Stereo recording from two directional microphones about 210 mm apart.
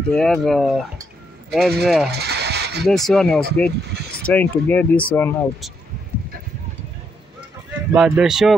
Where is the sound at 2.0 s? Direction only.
50° right (ahead or behind).